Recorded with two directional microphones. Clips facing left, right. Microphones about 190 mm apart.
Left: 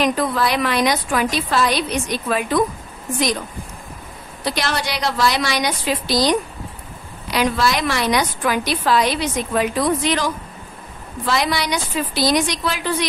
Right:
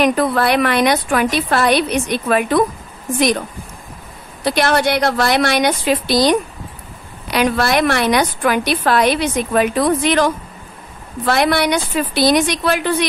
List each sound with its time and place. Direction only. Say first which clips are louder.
0.0 s a woman's voice: right 4 dB; 60° right (ahead or behind)
4.5 s a woman's voice: right 8 dB; 55° right (ahead or behind)